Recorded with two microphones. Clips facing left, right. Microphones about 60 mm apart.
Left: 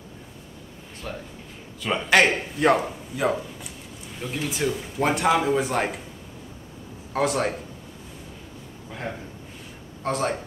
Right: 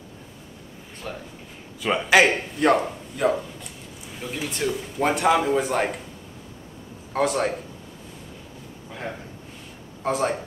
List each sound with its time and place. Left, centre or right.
1.0 s speech: centre
7.2 s speech: centre
8.9 s speech: centre